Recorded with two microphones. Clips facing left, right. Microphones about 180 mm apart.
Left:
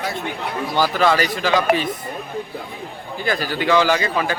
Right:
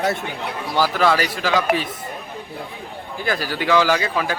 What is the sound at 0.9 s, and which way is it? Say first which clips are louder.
Speech: left 1 dB; 5° right (ahead or behind).